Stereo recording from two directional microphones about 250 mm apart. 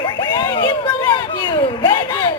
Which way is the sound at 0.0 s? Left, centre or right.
Centre.